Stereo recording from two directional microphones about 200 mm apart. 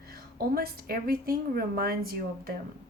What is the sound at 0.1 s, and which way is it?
A woman's voice, 50° right (ahead or behind).